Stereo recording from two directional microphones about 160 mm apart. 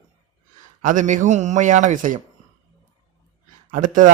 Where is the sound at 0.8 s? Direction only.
50° right (ahead or behind).